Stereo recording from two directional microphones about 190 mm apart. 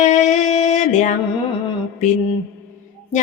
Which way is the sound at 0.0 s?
40° left (ahead or behind).